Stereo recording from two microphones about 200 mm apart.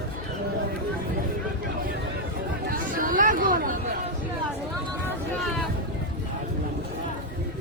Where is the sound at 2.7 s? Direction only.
45° right (ahead or behind).